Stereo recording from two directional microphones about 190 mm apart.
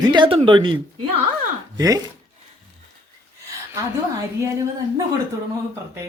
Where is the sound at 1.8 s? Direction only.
20° right (ahead or behind).